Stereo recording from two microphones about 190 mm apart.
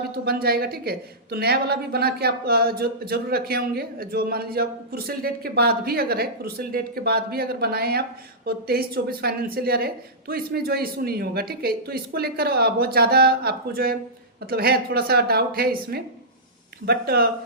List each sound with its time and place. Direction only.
0.3 s a woman's voice: 50° right (ahead or behind)